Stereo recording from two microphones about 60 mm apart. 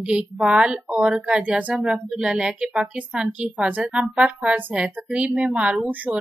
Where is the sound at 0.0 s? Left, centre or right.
Centre.